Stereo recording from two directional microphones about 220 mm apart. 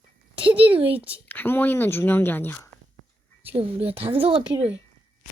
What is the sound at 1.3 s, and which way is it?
Speech, 10° left (ahead or behind).